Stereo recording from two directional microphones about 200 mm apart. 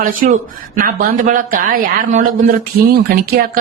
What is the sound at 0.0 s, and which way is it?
A woman's voice, 45° right (ahead or behind).